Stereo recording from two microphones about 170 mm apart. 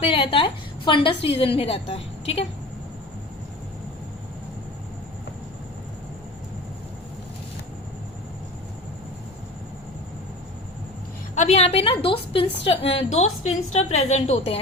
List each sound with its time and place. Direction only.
0.0 s a woman's voice: 30° left (ahead or behind)
11.3 s a woman's voice: 40° left (ahead or behind)